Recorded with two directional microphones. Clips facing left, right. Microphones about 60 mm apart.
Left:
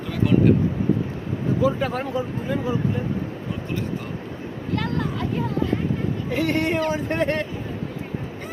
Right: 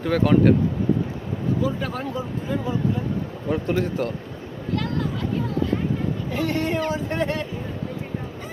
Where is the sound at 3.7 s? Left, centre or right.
Right.